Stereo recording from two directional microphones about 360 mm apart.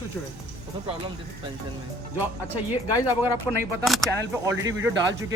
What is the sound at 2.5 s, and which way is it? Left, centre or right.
Speech, centre.